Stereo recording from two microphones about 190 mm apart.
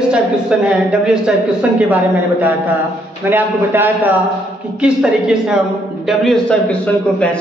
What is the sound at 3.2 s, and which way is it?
A man's voice, 10° right (ahead or behind).